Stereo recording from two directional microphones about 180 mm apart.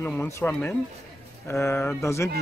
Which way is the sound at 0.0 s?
10° left (ahead or behind).